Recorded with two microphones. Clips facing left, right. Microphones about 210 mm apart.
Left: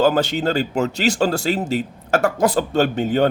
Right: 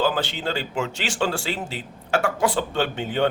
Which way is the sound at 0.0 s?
45° left (ahead or behind).